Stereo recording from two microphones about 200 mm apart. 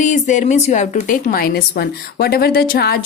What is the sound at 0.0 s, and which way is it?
Speech, 40° left (ahead or behind).